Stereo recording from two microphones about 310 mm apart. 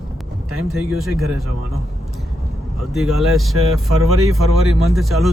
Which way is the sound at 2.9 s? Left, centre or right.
Centre.